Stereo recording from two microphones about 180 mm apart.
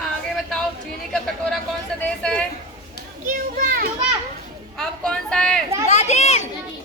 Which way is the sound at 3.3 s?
50° right (ahead or behind).